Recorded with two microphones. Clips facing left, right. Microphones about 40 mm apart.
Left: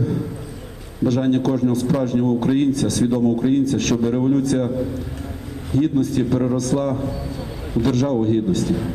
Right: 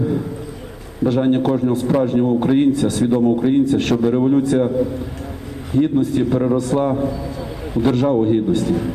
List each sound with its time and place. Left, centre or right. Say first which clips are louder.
1.0 s a man's voice: right 2 dB; centre
5.7 s a man's voice: right 2 dB; right